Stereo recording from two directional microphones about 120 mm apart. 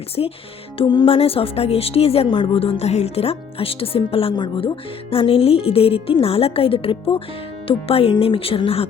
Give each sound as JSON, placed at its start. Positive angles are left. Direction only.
{"t": 0.2, "sound": "speech", "side_deg": 45}